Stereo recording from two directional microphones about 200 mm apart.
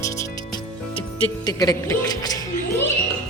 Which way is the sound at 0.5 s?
25° left (ahead or behind).